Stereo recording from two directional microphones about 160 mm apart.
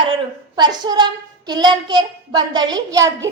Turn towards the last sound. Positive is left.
turn(degrees=-20)  # may be behind; listen again after turning